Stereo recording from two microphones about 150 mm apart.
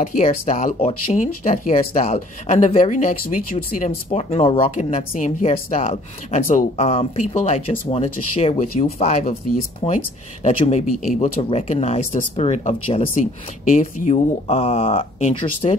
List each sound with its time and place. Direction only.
0.0 s speech: 60° left (ahead or behind); by 4.6 s 40° left (ahead or behind)
4.6 s speech: 55° left (ahead or behind)
6.8 s speech: 45° left (ahead or behind)